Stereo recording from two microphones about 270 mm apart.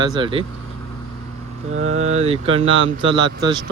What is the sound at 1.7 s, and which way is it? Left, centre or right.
Speech, right.